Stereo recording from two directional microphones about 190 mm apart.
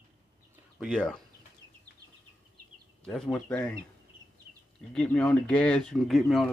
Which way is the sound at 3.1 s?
Centre (ahead or behind).